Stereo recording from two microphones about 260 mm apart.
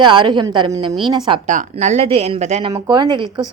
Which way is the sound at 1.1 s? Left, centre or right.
Right.